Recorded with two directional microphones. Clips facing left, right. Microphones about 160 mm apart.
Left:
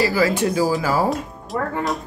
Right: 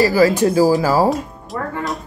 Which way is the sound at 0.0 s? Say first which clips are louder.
Right 5 dB; 40° right (ahead or behind).